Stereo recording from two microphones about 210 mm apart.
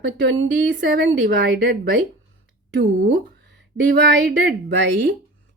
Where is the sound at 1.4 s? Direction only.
45° right (ahead or behind).